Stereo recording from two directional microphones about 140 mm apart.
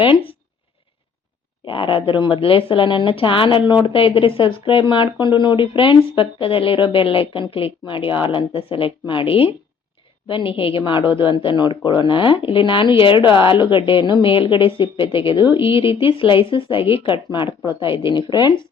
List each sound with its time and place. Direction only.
1.6 s speech: 40° left (ahead or behind)